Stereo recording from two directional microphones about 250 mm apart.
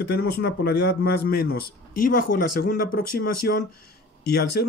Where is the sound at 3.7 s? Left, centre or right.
Left.